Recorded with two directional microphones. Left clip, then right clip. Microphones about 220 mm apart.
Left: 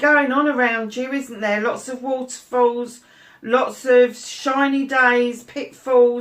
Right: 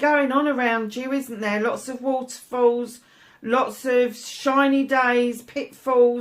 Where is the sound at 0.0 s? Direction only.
40° right (ahead or behind).